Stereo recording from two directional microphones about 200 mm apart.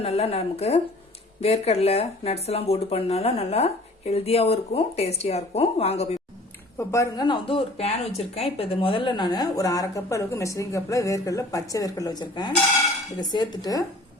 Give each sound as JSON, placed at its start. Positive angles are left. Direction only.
{"t": 0.0, "sound": "speech", "side_deg": 30}
{"t": 6.7, "sound": "speech", "side_deg": 15}